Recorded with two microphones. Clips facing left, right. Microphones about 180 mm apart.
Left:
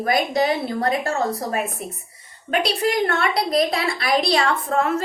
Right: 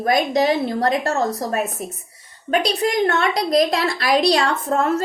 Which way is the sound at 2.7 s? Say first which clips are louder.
Right 1 dB; 40° right (ahead or behind).